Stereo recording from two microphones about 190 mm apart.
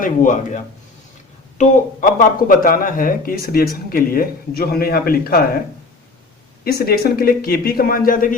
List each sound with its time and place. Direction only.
0.0 s speech: 45° left (ahead or behind)
6.7 s speech: 55° left (ahead or behind)